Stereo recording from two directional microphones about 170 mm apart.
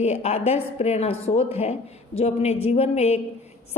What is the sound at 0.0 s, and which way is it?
A woman's voice, 40° left (ahead or behind).